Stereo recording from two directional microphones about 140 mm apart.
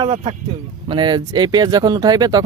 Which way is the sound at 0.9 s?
35° right (ahead or behind).